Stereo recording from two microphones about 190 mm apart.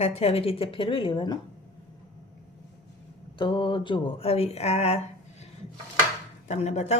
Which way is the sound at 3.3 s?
25° left (ahead or behind).